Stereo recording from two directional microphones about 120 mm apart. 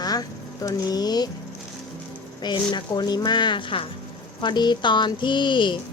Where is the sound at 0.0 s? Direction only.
30° left (ahead or behind).